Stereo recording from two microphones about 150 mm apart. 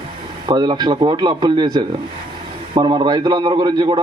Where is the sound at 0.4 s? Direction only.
30° right (ahead or behind).